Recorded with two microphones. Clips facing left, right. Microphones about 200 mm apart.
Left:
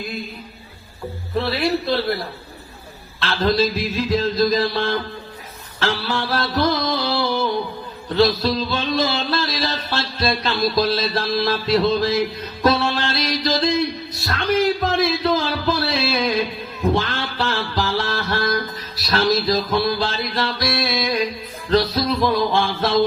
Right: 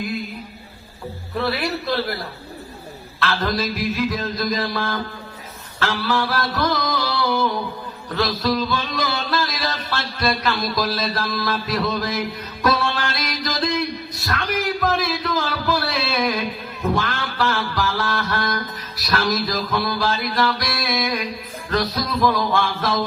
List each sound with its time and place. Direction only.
1.4 s music: 25° left (ahead or behind)
3.2 s music: 25° left (ahead or behind)
14.3 s a sound: 30° left (ahead or behind)
16.9 s music: 25° left (ahead or behind)